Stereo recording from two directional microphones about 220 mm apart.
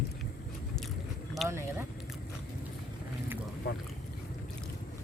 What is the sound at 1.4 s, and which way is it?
Speech, 10° right (ahead or behind).